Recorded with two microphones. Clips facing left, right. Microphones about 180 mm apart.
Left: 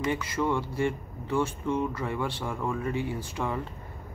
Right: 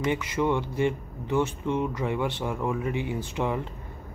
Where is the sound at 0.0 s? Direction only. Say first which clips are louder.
Right 2 dB; 20° right (ahead or behind).